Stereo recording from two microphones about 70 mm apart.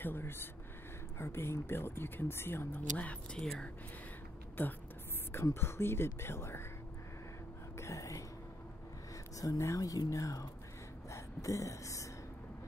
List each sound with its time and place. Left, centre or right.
0.0 s speech: left
2.8 s speech: left
3.3 s speech: centre
4.6 s speech: left
7.7 s speech: left
9.4 s speech: left